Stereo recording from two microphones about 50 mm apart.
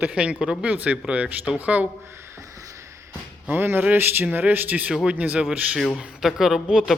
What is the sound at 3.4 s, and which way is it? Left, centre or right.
A man's voice, right.